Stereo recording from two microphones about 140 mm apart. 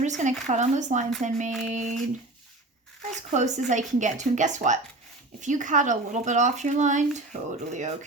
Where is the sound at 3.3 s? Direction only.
55° right (ahead or behind).